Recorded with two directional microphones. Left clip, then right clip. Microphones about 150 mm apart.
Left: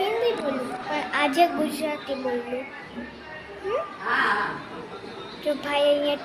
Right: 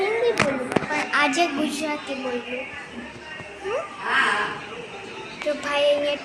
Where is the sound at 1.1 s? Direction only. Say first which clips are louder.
Even; 20° left (ahead or behind).